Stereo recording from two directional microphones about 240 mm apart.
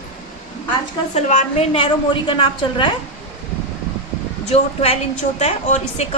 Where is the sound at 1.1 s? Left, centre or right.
Left.